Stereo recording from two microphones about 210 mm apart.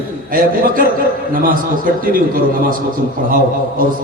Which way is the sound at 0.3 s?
40° right (ahead or behind).